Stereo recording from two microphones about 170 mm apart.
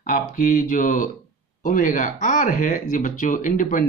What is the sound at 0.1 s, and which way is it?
Speech, 50° left (ahead or behind).